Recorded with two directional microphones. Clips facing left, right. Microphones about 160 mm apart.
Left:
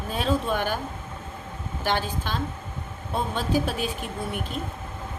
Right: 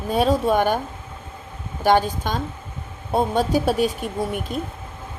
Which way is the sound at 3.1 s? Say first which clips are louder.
Right 6 dB; 40° right (ahead or behind).